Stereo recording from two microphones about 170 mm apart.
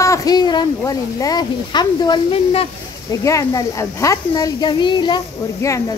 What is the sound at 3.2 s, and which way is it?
A woman's voice, 20° left (ahead or behind).